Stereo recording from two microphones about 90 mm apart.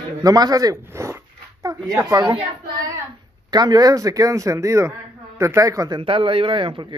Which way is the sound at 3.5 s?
50° right (ahead or behind).